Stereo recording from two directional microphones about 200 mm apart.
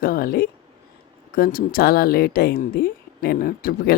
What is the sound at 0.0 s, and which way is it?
Speech, 45° left (ahead or behind).